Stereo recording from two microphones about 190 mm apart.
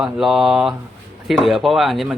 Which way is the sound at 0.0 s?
Centre (ahead or behind).